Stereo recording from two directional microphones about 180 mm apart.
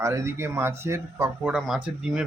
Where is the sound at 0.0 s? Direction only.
15° right (ahead or behind).